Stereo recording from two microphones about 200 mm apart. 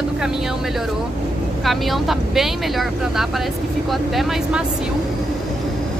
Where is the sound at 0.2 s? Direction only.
5° right (ahead or behind).